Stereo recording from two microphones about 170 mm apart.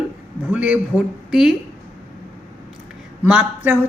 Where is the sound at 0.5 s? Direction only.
10° right (ahead or behind).